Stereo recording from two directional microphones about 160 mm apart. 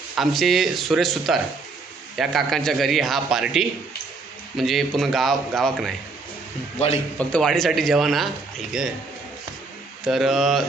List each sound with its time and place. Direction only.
0.2 s a man's voice: centre (ahead or behind)
6.7 s a man's voice: 40° left (ahead or behind)
7.2 s a man's voice: 5° left (ahead or behind)
10.1 s a man's voice: centre (ahead or behind)